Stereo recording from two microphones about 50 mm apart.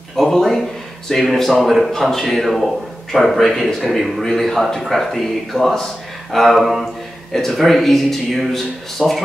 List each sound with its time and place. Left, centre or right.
0.1 s speech: centre